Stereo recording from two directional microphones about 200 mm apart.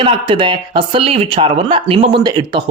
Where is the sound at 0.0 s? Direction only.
25° right (ahead or behind).